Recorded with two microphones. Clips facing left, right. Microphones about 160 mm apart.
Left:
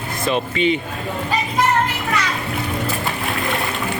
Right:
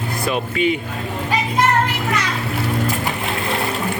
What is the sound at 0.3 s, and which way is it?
Speech, 5° right (ahead or behind).